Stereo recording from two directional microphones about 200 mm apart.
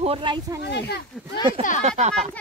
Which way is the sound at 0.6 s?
55° left (ahead or behind).